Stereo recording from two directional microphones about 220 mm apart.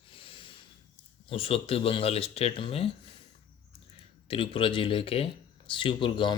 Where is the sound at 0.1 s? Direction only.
25° left (ahead or behind).